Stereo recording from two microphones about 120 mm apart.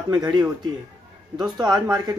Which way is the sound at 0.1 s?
35° right (ahead or behind).